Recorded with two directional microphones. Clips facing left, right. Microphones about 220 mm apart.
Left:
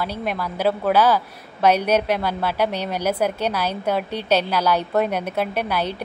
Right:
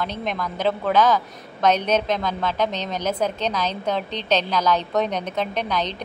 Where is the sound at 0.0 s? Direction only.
10° left (ahead or behind).